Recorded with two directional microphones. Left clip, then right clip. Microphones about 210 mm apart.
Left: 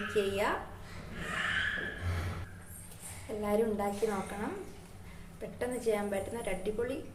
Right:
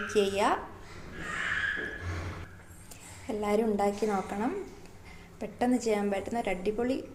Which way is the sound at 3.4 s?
40° right (ahead or behind).